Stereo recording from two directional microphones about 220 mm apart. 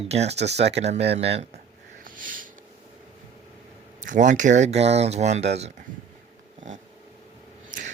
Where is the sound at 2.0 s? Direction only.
40° right (ahead or behind).